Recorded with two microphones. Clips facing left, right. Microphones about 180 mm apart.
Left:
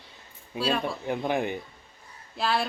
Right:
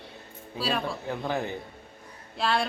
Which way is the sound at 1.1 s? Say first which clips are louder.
Left 4 dB; 15° left (ahead or behind).